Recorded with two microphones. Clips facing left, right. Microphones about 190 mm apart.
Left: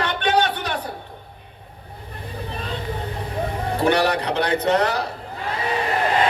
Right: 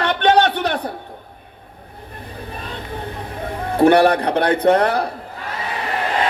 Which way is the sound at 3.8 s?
55° right (ahead or behind).